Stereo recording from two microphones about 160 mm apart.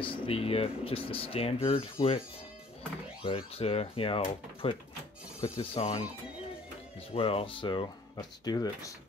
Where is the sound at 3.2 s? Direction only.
35° left (ahead or behind).